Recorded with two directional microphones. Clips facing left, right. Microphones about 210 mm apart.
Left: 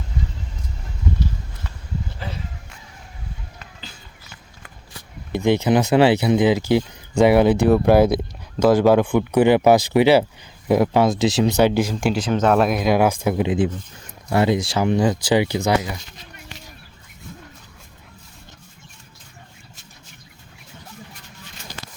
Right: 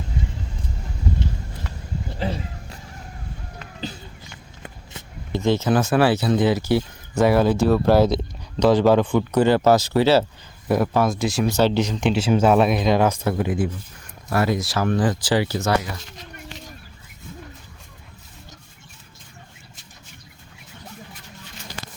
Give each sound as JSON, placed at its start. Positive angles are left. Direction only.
{"t": 2.1, "sound": "a sound", "side_deg": -25}
{"t": 5.3, "sound": "speech", "side_deg": 15}
{"t": 12.1, "sound": "speech", "side_deg": -5}